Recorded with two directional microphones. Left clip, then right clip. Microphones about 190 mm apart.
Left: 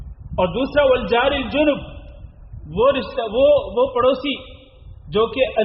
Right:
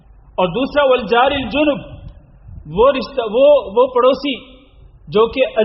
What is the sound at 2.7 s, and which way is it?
A man's voice, 30° right (ahead or behind).